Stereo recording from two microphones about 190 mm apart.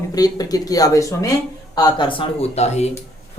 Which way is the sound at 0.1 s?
20° left (ahead or behind).